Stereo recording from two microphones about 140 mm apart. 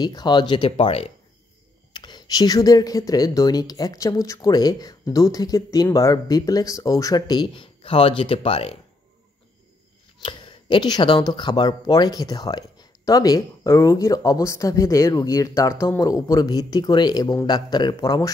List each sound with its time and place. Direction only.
0.0 s speech: 30° left (ahead or behind)
2.0 s speech: 30° left (ahead or behind)
10.2 s speech: 35° left (ahead or behind)